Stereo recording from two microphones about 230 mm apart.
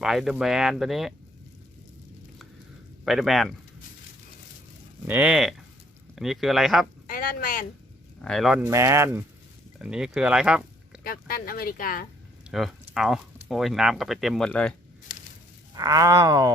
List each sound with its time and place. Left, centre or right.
0.0 s speech: centre
3.0 s speech: centre
5.0 s speech: centre
7.1 s speech: left
8.2 s speech: centre
11.0 s speech: left
12.5 s speech: centre
15.7 s speech: centre